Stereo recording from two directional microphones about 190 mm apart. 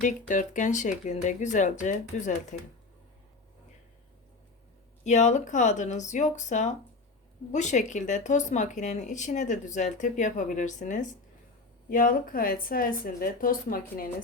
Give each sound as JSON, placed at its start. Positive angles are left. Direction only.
{"t": 0.0, "sound": "speech", "side_deg": 40}
{"t": 5.0, "sound": "speech", "side_deg": 40}